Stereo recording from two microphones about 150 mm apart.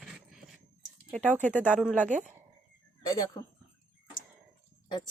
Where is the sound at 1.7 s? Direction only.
10° right (ahead or behind).